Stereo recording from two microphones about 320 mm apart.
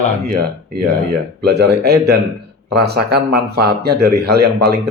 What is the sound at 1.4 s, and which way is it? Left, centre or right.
Speech, right.